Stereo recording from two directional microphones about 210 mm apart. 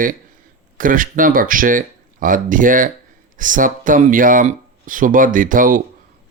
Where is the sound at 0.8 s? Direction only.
40° right (ahead or behind).